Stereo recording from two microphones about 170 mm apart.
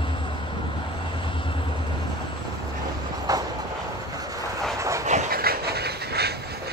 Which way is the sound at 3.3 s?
20° right (ahead or behind).